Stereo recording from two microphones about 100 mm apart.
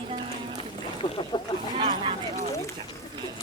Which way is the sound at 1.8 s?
65° right (ahead or behind).